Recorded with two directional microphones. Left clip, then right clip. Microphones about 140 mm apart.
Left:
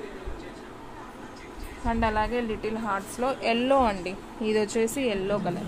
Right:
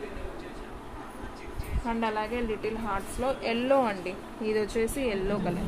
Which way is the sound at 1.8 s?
60° left (ahead or behind).